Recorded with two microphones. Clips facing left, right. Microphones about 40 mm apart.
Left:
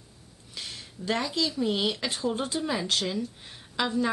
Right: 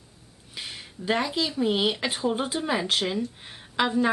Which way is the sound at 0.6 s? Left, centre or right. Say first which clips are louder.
Right 2 dB; right.